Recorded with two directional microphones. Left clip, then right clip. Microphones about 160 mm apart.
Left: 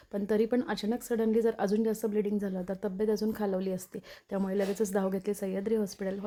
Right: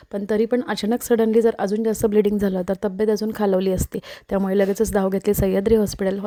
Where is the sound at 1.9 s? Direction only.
50° right (ahead or behind).